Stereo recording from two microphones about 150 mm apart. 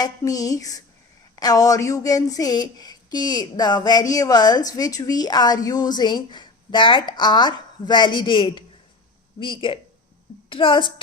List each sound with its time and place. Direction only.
0.0 s a woman's voice: 25° left (ahead or behind)